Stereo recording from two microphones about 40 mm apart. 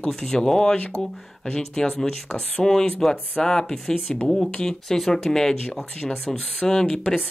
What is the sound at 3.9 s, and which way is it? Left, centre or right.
Speech, left.